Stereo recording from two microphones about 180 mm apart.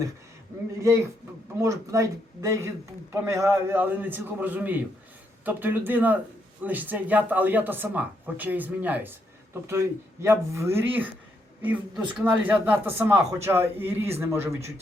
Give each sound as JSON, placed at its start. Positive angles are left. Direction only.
{"t": 1.5, "sound": "speech", "side_deg": -15}